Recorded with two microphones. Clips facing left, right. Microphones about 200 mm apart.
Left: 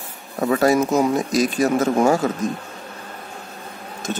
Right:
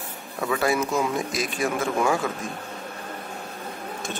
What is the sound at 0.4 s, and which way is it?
Speech, 40° left (ahead or behind).